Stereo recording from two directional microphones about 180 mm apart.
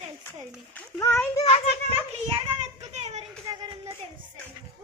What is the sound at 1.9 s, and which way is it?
A child's voice, 30° right (ahead or behind).